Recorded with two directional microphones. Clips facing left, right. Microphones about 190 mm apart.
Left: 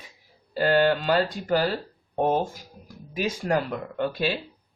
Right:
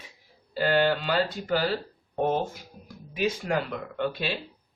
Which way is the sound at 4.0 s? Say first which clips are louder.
Left 3 dB; 45° left (ahead or behind).